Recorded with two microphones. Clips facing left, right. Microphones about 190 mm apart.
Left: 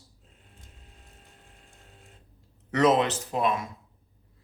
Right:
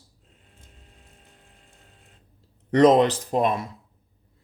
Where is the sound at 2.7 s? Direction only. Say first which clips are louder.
Right 6 dB; 35° right (ahead or behind).